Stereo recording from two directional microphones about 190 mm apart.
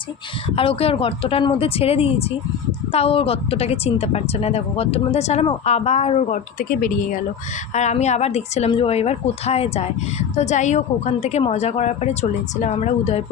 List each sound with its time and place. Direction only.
0.5 s a woman's voice: 30° left (ahead or behind)